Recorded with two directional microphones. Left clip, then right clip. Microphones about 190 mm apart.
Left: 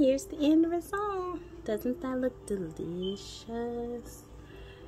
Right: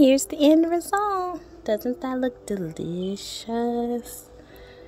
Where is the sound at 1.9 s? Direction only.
15° right (ahead or behind).